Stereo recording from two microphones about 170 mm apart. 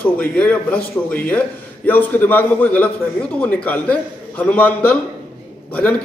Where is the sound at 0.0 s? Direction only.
10° left (ahead or behind).